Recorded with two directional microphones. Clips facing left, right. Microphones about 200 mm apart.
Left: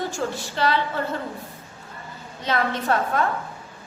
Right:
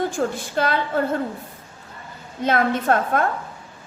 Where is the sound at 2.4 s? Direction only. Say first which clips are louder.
Right 4 dB; 50° right (ahead or behind).